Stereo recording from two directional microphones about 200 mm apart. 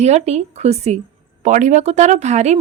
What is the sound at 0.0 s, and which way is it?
A woman's voice, 35° right (ahead or behind).